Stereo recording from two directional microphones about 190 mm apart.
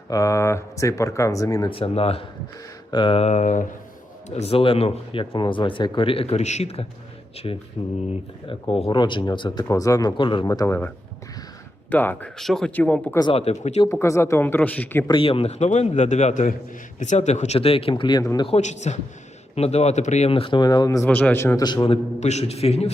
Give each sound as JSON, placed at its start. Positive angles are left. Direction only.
{"t": 0.1, "sound": "a man's voice", "side_deg": 15}
{"t": 4.4, "sound": "speech", "side_deg": 30}
{"t": 11.9, "sound": "speech", "side_deg": 10}
{"t": 13.1, "sound": "a man's voice", "side_deg": 30}
{"t": 13.8, "sound": "speech", "side_deg": 15}
{"t": 15.0, "sound": "a man's voice", "side_deg": 25}
{"t": 18.4, "sound": "a man's voice", "side_deg": 35}
{"t": 22.2, "sound": "a man's voice", "side_deg": 35}